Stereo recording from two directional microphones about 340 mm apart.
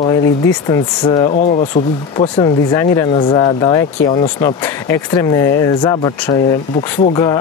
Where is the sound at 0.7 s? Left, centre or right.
Centre.